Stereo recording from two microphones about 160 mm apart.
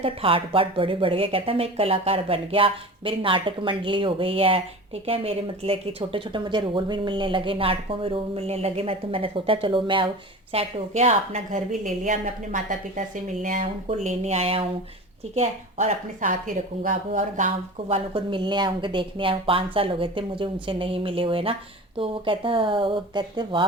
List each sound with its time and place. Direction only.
0.0 s speech: 35° right (ahead or behind)
10.5 s a woman's voice: 40° right (ahead or behind)